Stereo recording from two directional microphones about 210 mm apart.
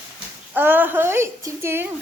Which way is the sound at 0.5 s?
10° right (ahead or behind).